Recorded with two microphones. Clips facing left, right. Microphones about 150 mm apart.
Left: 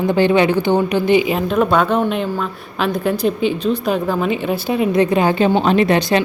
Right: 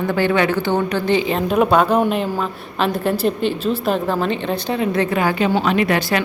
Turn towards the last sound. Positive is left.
turn(degrees=25)  # may be behind; listen again after turning